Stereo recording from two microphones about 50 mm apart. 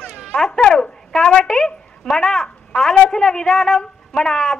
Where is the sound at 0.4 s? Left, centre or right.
Centre.